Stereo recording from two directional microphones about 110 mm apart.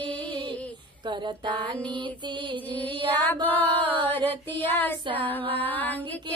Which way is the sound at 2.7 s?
15° left (ahead or behind).